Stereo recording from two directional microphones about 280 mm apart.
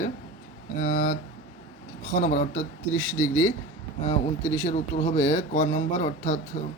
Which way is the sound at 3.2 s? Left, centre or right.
Left.